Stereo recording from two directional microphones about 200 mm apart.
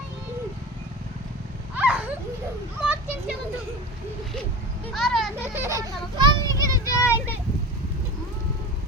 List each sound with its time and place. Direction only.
1.7 s a sound: 5° right (ahead or behind)
4.9 s a child's voice: centre (ahead or behind)
5.5 s a child's voice: 15° right (ahead or behind)
6.7 s vehicle: 15° left (ahead or behind)